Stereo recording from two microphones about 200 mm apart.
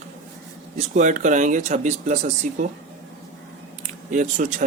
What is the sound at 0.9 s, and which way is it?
Speech, 40° right (ahead or behind).